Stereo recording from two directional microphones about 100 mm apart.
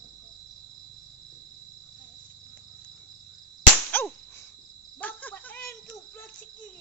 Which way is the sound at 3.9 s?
20° left (ahead or behind).